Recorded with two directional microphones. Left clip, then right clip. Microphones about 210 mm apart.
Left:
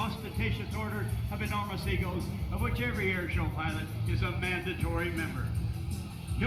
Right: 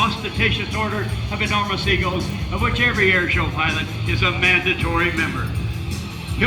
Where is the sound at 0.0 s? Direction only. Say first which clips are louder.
Right 16 dB; 55° left (ahead or behind).